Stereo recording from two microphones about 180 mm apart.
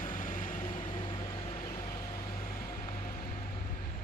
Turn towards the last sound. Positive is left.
turn(degrees=45)  # may be behind; listen again after turning